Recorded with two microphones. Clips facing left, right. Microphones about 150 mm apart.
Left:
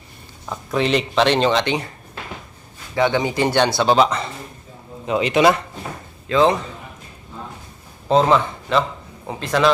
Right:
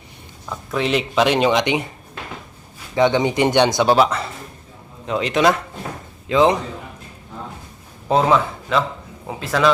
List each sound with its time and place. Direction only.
0.5 s speech: centre (ahead or behind); by 1.9 s 15° right (ahead or behind)
2.9 s speech: 20° right (ahead or behind); by 5.6 s 5° left (ahead or behind)
6.2 s a man's voice: 15° right (ahead or behind)
8.0 s a man's voice: 5° right (ahead or behind)